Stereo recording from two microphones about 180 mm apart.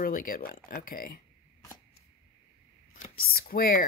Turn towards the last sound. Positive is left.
turn(degrees=50)  # may be behind; listen again after turning